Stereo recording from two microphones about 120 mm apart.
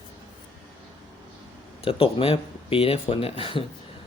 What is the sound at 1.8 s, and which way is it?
Speech, 50° left (ahead or behind).